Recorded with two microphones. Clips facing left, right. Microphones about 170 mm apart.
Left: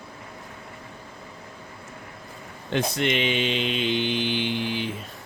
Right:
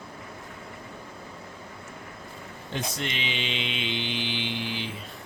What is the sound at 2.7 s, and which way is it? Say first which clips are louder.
Mantra: left 8 dB; 65° left (ahead or behind).